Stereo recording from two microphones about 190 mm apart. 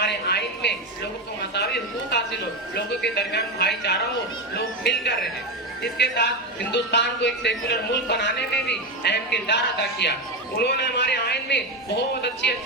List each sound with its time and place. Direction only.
0.0 s television: 60° left (ahead or behind)
2.0 s a man's voice: 60° left (ahead or behind)
5.8 s a man's voice: 60° left (ahead or behind)